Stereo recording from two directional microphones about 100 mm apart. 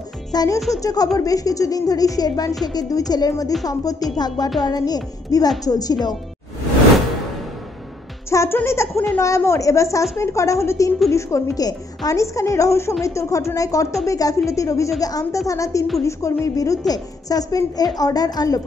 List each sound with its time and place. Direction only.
0.3 s a woman's voice: 40° left (ahead or behind)
8.3 s a woman's voice: 30° left (ahead or behind)